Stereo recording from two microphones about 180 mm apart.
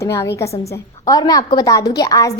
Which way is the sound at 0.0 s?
15° left (ahead or behind).